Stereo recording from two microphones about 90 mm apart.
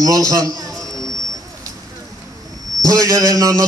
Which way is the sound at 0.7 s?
5° left (ahead or behind).